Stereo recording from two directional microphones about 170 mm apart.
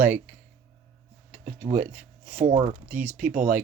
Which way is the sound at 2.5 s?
40° right (ahead or behind).